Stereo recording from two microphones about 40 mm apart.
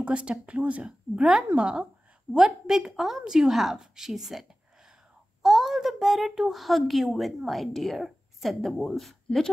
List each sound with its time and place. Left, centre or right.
0.0 s speech: right
0.8 s a woman's voice: centre
2.3 s a woman's voice: centre